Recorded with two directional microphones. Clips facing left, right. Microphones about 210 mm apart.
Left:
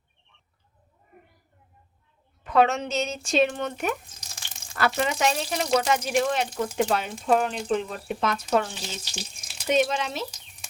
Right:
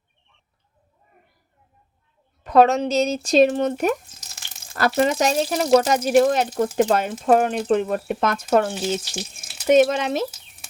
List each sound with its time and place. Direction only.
2.4 s speech: 40° right (ahead or behind)